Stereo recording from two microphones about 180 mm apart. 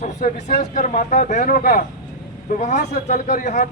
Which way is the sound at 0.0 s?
40° left (ahead or behind).